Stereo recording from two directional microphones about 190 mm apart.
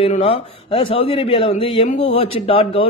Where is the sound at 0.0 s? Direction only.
30° left (ahead or behind).